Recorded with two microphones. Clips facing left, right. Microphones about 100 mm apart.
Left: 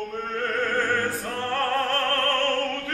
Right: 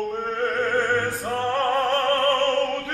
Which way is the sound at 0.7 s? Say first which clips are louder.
Right 2 dB; 20° right (ahead or behind).